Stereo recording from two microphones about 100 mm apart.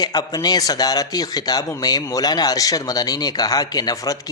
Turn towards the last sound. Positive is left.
turn(degrees=40)  # may be behind; listen again after turning